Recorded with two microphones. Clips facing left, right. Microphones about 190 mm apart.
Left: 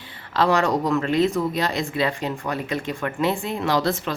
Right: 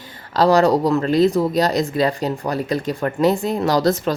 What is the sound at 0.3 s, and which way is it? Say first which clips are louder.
Speech: right 6 dB; 35° right (ahead or behind).